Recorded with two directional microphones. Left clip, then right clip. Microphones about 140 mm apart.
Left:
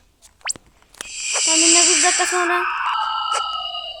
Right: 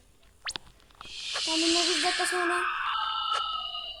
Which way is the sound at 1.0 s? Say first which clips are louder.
Left 10 dB; 30° left (ahead or behind).